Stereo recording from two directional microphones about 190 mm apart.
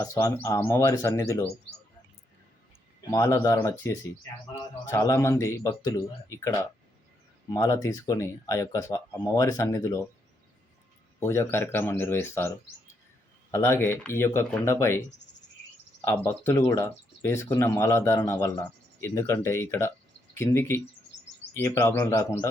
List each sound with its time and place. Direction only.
0.0 s speech: 15° left (ahead or behind)
3.1 s speech: 15° left (ahead or behind)
11.2 s speech: 15° left (ahead or behind)
16.0 s speech: 10° left (ahead or behind)